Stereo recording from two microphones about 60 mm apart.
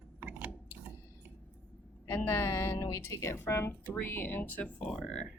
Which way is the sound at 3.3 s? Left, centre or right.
Left.